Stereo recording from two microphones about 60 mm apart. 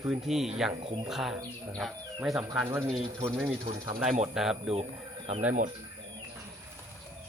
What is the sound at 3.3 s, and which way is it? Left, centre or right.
Speech, right.